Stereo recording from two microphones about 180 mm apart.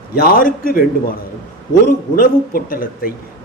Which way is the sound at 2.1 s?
50° left (ahead or behind).